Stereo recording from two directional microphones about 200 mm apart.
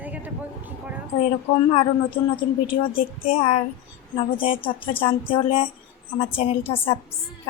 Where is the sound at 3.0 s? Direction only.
30° left (ahead or behind).